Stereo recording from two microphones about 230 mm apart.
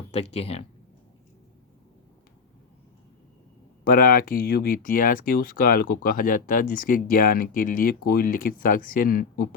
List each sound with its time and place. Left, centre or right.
0.1 s speech: left
3.8 s speech: left